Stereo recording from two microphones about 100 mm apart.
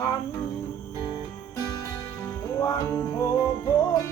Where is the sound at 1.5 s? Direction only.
35° left (ahead or behind).